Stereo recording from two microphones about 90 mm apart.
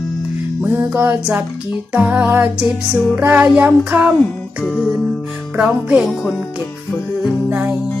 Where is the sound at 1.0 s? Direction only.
20° right (ahead or behind).